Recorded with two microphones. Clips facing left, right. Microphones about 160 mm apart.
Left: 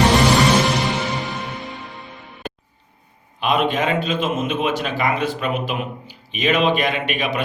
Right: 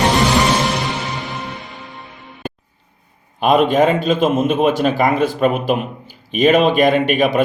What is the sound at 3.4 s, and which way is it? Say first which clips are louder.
A man's voice: right 7 dB; 45° right (ahead or behind).